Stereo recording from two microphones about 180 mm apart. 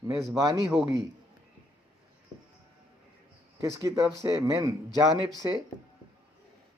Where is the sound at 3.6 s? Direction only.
15° right (ahead or behind).